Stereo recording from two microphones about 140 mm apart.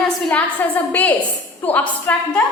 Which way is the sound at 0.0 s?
10° left (ahead or behind).